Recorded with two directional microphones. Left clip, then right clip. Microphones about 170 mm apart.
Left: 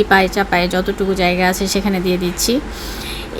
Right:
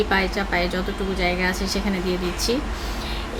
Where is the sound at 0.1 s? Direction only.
45° left (ahead or behind).